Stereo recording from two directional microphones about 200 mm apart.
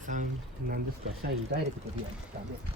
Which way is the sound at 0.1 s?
40° right (ahead or behind).